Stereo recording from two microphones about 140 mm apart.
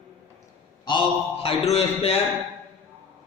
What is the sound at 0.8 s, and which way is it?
A man's voice, 35° left (ahead or behind).